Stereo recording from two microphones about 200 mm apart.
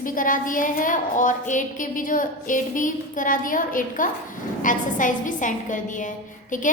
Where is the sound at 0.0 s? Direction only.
45° left (ahead or behind).